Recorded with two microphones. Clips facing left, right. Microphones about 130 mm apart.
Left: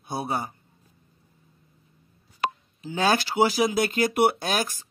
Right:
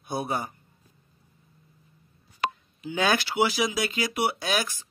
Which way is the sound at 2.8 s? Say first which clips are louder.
Left 2 dB; 35° left (ahead or behind).